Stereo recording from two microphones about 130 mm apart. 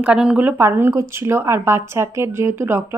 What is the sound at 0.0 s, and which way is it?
Speech, 10° right (ahead or behind).